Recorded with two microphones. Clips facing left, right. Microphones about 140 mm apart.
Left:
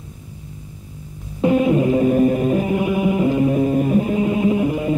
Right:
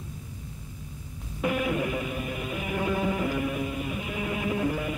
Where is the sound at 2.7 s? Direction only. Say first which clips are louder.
Left 9 dB; 15° left (ahead or behind).